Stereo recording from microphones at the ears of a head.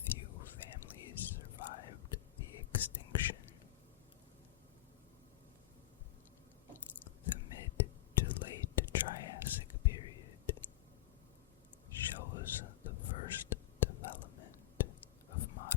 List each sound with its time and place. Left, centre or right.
0.0 s whispering: left
6.8 s whispering: left
11.9 s whispering: left